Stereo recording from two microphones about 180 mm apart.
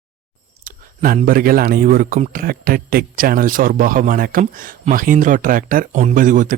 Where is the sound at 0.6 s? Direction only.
50° right (ahead or behind).